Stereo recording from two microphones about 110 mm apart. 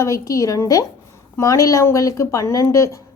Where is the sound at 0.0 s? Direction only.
30° left (ahead or behind).